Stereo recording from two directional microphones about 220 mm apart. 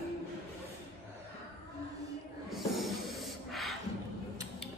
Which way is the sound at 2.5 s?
Centre (ahead or behind).